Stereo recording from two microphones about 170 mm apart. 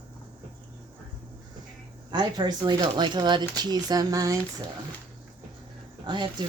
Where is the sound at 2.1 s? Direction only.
25° right (ahead or behind).